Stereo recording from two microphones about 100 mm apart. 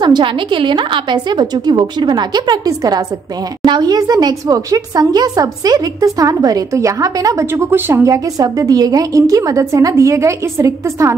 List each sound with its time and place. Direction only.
0.0 s a woman's voice: 50° right (ahead or behind); by 11.1 s 30° right (ahead or behind)